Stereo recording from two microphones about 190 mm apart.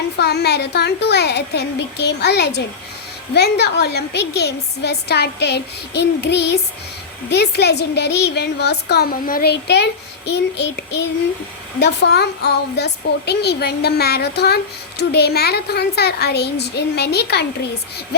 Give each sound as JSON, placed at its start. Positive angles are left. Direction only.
{"t": 0.2, "sound": "a woman's voice", "side_deg": 60}